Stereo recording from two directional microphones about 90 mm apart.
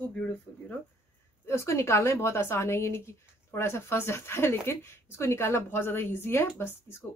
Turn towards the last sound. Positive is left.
turn(degrees=25)  # may be behind; listen again after turning